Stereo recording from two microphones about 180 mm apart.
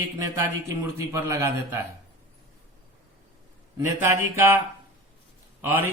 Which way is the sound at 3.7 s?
15° right (ahead or behind).